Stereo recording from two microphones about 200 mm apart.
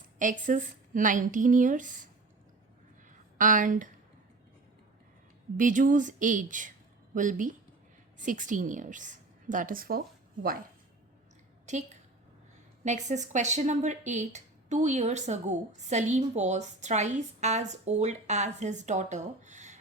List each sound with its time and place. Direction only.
0.2 s speech: 40° right (ahead or behind)
3.3 s speech: 40° right (ahead or behind)
5.5 s speech: 40° right (ahead or behind)
11.6 s a sound: 35° right (ahead or behind)
12.8 s speech: 35° right (ahead or behind)